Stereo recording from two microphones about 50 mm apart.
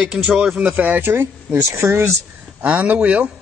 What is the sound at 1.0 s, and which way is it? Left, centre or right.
Speech, right.